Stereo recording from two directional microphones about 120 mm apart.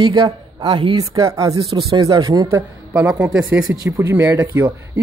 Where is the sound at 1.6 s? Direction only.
55° right (ahead or behind).